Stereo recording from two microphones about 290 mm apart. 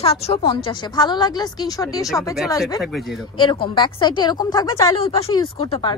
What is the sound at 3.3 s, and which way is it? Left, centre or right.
A woman's voice, centre.